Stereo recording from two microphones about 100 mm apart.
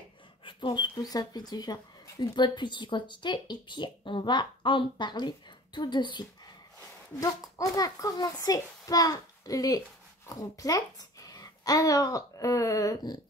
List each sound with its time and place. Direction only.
0.5 s speech: 55° left (ahead or behind)
0.9 s speech: 40° left (ahead or behind)
7.5 s a child's voice: 35° left (ahead or behind)